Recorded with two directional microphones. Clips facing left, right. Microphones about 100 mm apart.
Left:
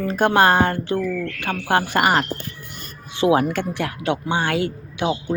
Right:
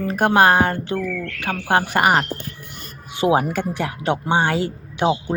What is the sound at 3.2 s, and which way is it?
Speech, 15° right (ahead or behind).